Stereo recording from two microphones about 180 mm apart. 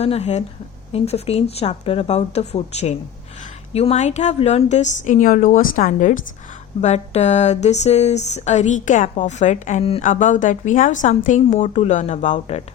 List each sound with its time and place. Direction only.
0.0 s a woman's voice: 35° left (ahead or behind)